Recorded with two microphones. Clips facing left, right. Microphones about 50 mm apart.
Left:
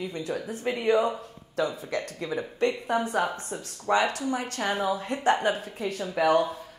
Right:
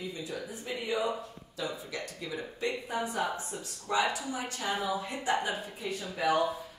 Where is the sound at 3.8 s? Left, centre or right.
Left.